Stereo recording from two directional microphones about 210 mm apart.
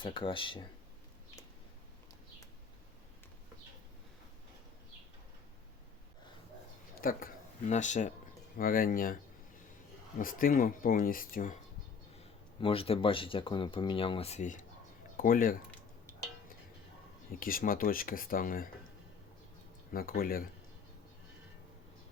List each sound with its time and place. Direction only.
0.0 s speech: 25° left (ahead or behind)
7.0 s speech: 40° left (ahead or behind)
10.2 s speech: 40° left (ahead or behind)
12.5 s speech: 25° left (ahead or behind); by 15.5 s 40° left (ahead or behind)
17.4 s speech: 40° left (ahead or behind)
19.9 s speech: 45° left (ahead or behind)